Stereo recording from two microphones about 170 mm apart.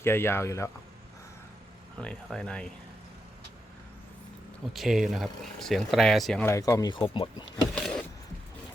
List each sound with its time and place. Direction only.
0.0 s speech: 15° left (ahead or behind)
2.0 s speech: 5° left (ahead or behind)
4.7 s speech: centre (ahead or behind)
6.4 s speech: 15° left (ahead or behind)
7.8 s power windows: 5° left (ahead or behind)